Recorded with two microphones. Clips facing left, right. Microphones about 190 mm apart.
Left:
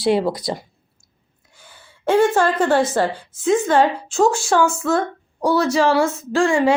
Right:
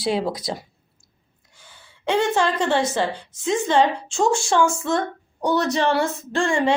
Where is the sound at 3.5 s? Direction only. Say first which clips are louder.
Left 4 dB; 50° left (ahead or behind).